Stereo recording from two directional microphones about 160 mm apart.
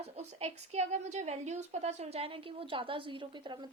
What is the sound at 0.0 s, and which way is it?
A woman's voice, 40° right (ahead or behind).